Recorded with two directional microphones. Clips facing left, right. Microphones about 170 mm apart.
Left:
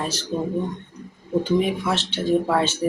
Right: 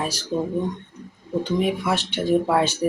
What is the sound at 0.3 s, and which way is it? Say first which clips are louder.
Speech: right 1 dB; 15° right (ahead or behind).